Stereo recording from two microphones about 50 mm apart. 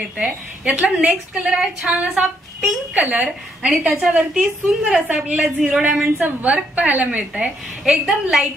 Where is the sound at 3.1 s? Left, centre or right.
Right.